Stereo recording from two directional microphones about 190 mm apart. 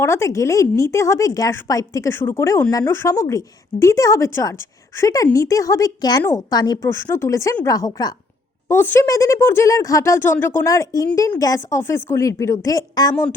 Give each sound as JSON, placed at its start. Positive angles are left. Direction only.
{"t": 0.0, "sound": "speech", "side_deg": 15}